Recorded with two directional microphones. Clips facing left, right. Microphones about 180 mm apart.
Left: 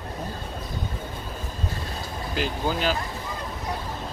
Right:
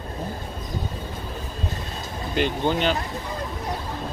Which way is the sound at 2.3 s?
5° left (ahead or behind).